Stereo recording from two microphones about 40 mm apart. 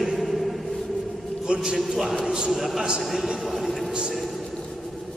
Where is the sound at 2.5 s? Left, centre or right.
Centre.